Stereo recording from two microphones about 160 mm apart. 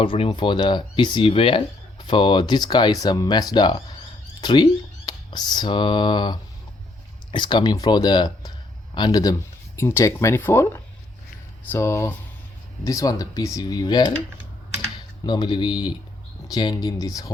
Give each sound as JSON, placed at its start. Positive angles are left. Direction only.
{"t": 0.0, "sound": "speech", "side_deg": 35}
{"t": 15.3, "sound": "speech", "side_deg": 30}